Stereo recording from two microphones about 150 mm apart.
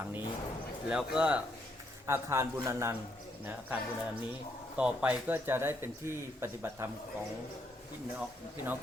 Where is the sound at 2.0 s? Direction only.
20° right (ahead or behind).